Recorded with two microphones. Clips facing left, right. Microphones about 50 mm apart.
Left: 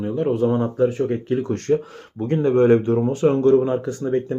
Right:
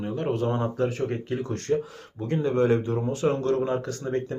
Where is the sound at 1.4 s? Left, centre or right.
Left.